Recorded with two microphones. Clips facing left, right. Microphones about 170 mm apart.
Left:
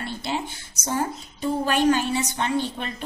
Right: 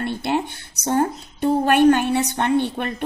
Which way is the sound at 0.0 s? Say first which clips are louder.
Right 6 dB; 60° right (ahead or behind).